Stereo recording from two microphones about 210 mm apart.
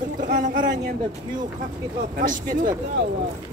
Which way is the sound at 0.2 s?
40° right (ahead or behind).